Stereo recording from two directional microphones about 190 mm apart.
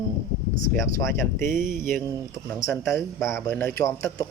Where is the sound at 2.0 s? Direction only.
15° right (ahead or behind).